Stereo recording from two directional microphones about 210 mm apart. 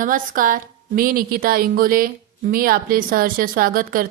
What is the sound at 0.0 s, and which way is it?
A woman's voice, 40° right (ahead or behind).